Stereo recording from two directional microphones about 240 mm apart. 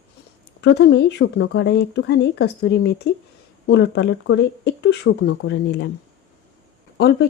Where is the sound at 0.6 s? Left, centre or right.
Left.